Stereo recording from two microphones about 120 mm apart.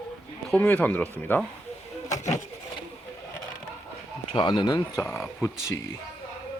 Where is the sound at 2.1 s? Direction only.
75° left (ahead or behind).